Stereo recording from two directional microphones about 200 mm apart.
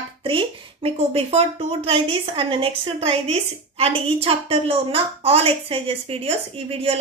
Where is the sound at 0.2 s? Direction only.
25° right (ahead or behind).